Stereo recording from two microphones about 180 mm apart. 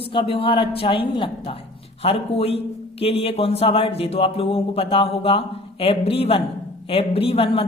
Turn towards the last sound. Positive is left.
turn(degrees=30)  # may be behind; listen again after turning